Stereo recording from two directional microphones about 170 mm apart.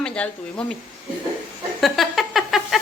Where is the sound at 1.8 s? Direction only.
Centre (ahead or behind).